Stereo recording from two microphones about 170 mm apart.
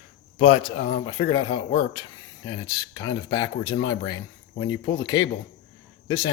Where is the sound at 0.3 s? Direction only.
35° left (ahead or behind).